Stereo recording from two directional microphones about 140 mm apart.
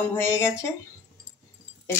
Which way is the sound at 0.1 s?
20° left (ahead or behind).